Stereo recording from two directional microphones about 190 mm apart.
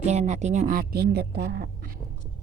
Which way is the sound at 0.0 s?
35° right (ahead or behind).